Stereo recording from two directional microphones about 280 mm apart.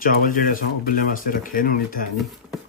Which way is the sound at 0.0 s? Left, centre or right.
Left.